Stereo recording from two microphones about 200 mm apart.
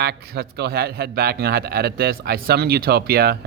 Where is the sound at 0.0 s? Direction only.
55° right (ahead or behind).